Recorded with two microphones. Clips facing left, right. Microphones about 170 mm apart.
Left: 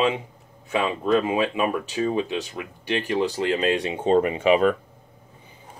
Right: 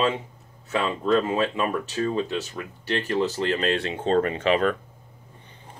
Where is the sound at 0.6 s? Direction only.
15° left (ahead or behind).